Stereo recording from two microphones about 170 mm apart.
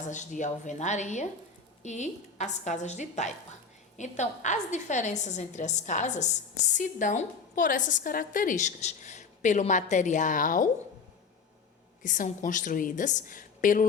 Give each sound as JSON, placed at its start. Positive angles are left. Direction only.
{"t": 0.1, "sound": "a woman's voice", "side_deg": 45}
{"t": 12.0, "sound": "a woman's voice", "side_deg": 50}